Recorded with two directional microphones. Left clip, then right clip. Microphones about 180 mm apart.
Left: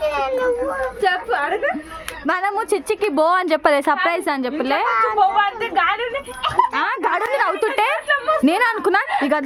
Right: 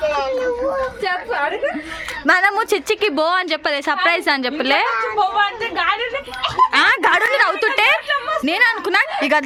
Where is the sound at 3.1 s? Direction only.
25° left (ahead or behind).